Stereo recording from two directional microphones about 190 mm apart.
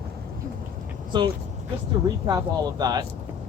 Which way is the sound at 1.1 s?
25° right (ahead or behind).